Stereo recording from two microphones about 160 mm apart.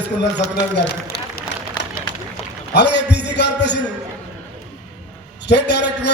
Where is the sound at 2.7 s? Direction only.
90° left.